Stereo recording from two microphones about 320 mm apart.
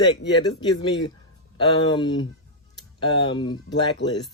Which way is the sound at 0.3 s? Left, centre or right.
Centre.